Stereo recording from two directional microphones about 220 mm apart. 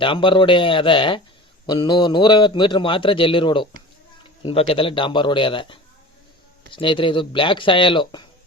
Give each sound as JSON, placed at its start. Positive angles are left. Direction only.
{"t": 0.0, "sound": "a man's voice", "side_deg": 25}